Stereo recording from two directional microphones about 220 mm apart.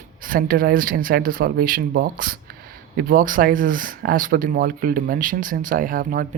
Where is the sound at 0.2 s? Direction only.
40° right (ahead or behind).